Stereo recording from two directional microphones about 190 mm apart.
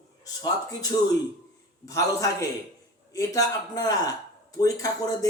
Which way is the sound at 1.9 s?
15° left (ahead or behind).